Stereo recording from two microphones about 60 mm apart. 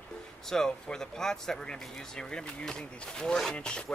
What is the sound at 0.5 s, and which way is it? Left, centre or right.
Speech, centre.